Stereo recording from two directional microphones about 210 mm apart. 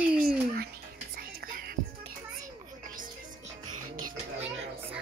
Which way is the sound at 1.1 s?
45° right (ahead or behind).